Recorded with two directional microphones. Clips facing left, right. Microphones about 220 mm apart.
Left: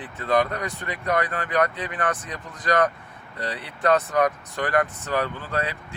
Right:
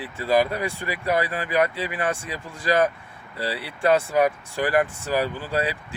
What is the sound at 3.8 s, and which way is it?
Speech, 10° right (ahead or behind).